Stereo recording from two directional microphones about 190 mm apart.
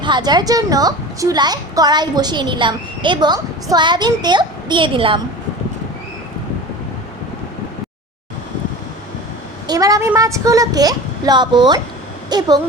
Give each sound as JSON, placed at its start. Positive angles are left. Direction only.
{"t": 0.0, "sound": "a woman's voice", "side_deg": -25}
{"t": 9.6, "sound": "a woman's voice", "side_deg": -20}